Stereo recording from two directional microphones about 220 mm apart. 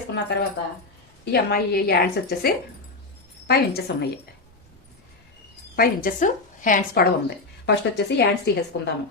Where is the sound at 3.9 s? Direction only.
50° left (ahead or behind).